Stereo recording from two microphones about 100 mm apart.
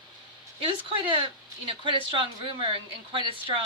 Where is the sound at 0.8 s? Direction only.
65° right (ahead or behind).